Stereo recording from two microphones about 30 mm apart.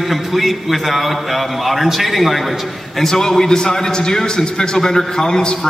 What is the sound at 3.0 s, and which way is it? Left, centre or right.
A man's voice, centre.